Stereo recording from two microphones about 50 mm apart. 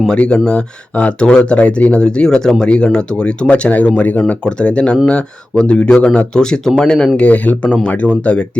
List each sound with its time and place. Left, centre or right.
0.1 s speech: centre
7.2 s speech: left